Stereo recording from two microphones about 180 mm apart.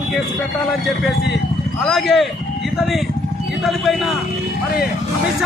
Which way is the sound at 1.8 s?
Centre (ahead or behind).